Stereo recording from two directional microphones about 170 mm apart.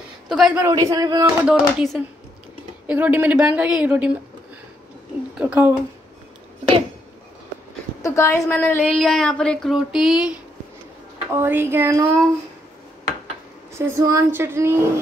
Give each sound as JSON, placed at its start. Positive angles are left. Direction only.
{"t": 0.3, "sound": "a sound", "side_deg": 0}
{"t": 0.7, "sound": "a man's voice", "side_deg": -20}
{"t": 1.4, "sound": "a sound", "side_deg": -5}
{"t": 2.9, "sound": "a woman's voice", "side_deg": -10}
{"t": 5.4, "sound": "a woman's voice", "side_deg": -10}
{"t": 8.0, "sound": "a woman's voice", "side_deg": 15}
{"t": 8.9, "sound": "a sound", "side_deg": 5}
{"t": 11.3, "sound": "a woman's voice", "side_deg": -15}
{"t": 13.7, "sound": "a woman's voice", "side_deg": -15}